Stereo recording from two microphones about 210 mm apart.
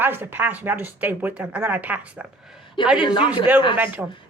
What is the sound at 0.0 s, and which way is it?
Speech, 10° right (ahead or behind).